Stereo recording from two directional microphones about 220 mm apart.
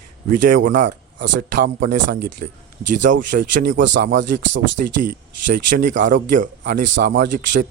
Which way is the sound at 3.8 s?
55° right (ahead or behind).